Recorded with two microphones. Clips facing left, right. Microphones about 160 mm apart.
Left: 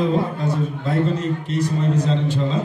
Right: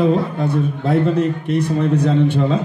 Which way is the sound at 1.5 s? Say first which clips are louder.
Right 4 dB; 60° right (ahead or behind).